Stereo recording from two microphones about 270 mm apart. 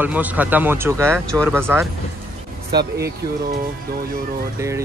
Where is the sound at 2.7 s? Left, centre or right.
Right.